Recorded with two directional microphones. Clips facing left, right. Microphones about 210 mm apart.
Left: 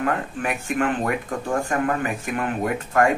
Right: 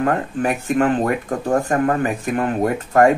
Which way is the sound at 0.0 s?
40° right (ahead or behind).